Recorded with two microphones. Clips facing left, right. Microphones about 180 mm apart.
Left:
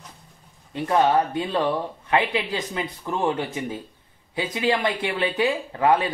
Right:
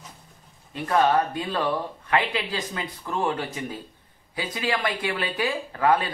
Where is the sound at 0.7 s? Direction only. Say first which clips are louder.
Left 2 dB; 20° left (ahead or behind).